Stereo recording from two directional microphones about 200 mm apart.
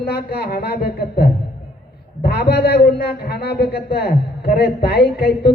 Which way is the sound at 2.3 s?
55° left (ahead or behind).